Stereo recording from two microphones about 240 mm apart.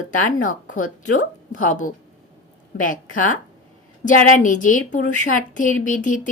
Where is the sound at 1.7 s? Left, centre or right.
Left.